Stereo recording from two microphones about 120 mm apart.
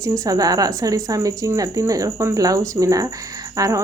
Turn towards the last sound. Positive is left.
turn(degrees=-30)  # may be behind; listen again after turning